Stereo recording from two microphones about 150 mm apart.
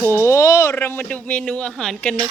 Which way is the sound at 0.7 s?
10° left (ahead or behind).